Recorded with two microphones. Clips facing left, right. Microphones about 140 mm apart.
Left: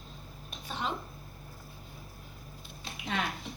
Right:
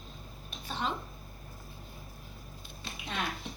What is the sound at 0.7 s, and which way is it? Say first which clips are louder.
Speech: right 1 dB; 10° left (ahead or behind).